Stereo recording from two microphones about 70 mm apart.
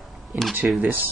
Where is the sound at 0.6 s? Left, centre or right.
Right.